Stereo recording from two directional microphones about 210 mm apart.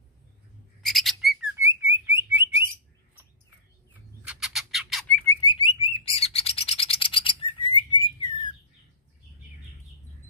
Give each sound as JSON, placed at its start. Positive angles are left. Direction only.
{"t": 0.8, "sound": "bird", "side_deg": 0}
{"t": 1.6, "sound": "bird", "side_deg": -15}
{"t": 4.3, "sound": "bird", "side_deg": 0}
{"t": 5.4, "sound": "bird", "side_deg": 25}